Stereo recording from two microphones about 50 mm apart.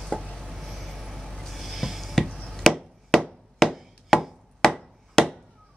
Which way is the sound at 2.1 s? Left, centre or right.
Centre.